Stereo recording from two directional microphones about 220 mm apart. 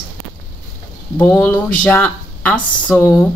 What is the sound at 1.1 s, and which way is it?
Speech, 10° left (ahead or behind).